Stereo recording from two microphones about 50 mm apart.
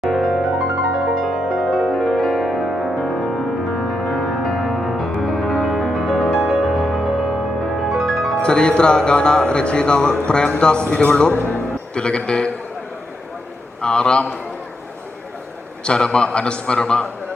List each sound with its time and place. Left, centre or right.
0.0 s music: centre
8.4 s speech: centre
11.3 s music: left
11.9 s speech: centre
13.8 s speech: centre
15.8 s speech: centre